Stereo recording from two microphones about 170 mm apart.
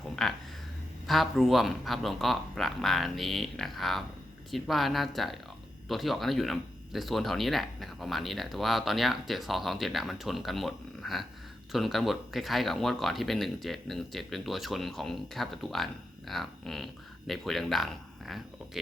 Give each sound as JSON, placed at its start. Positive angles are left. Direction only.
{"t": 0.2, "sound": "speech", "side_deg": 0}